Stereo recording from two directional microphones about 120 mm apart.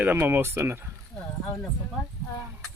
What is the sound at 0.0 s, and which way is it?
Speech, 20° right (ahead or behind).